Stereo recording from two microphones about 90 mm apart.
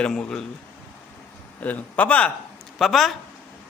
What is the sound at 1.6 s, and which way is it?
Speech, 15° left (ahead or behind).